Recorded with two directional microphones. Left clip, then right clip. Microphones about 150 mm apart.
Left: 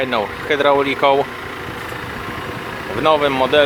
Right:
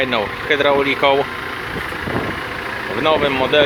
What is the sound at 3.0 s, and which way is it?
Speech, 15° left (ahead or behind).